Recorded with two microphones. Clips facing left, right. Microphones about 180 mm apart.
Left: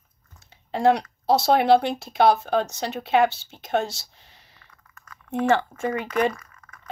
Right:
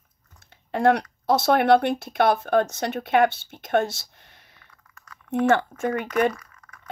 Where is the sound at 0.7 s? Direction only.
55° right (ahead or behind).